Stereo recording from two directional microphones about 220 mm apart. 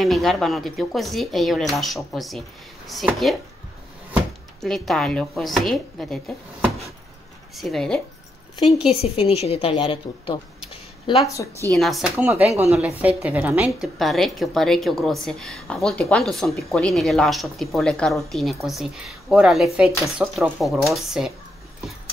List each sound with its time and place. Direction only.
0.0 s a woman's voice: centre (ahead or behind)
4.6 s a woman's voice: centre (ahead or behind)
7.5 s a woman's voice: centre (ahead or behind)
8.8 s a woman's voice: 25° left (ahead or behind)
11.6 s a woman's voice: centre (ahead or behind)